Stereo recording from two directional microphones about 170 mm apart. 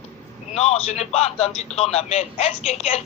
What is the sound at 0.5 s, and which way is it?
A man's voice, 40° left (ahead or behind).